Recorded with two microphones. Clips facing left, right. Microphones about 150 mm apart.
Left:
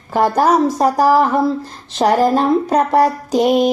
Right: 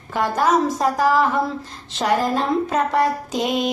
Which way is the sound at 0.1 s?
35° left (ahead or behind).